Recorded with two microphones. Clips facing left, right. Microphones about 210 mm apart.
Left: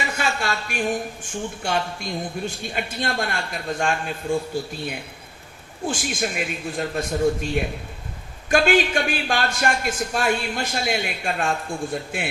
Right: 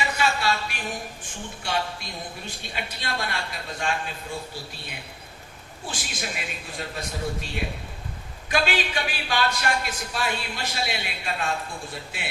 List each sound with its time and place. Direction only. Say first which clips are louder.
0.0 s a man's voice: even; 50° left (ahead or behind)
5.8 s a man's voice: left 9 dB; 50° left (ahead or behind)